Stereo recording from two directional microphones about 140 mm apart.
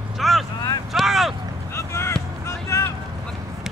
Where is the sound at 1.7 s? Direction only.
20° left (ahead or behind).